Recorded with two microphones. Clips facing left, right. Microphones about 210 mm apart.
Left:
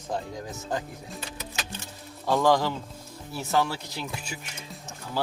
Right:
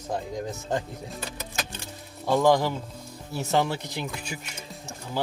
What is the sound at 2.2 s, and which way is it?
Speech, 15° right (ahead or behind).